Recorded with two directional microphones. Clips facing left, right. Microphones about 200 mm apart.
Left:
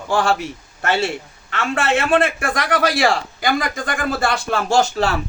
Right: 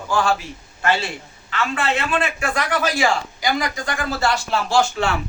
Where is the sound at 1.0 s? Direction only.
60° left (ahead or behind); by 5.2 s 40° left (ahead or behind).